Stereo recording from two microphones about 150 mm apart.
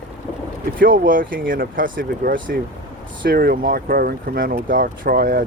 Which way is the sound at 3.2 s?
90° right.